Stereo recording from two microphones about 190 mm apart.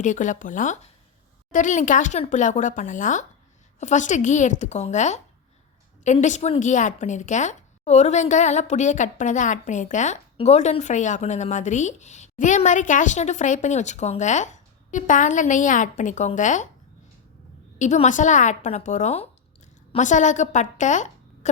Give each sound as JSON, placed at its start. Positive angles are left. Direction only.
{"t": 0.0, "sound": "a woman's voice", "side_deg": 40}
{"t": 17.7, "sound": "a woman's voice", "side_deg": 40}